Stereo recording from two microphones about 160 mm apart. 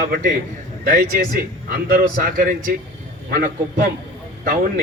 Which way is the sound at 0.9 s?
60° right (ahead or behind).